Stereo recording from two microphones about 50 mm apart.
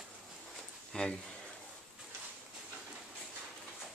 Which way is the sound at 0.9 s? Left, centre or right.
Centre.